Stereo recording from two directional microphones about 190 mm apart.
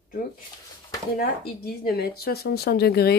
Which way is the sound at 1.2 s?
55° left (ahead or behind).